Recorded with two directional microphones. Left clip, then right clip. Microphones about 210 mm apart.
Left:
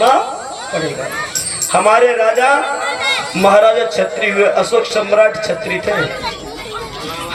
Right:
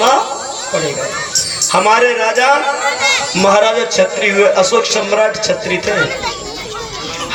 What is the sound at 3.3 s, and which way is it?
A man's voice, 50° right (ahead or behind).